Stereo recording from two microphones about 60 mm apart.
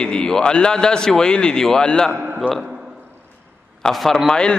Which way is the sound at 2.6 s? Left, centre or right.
Centre.